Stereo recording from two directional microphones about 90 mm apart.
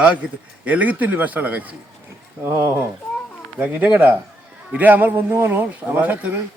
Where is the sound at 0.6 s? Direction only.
15° right (ahead or behind).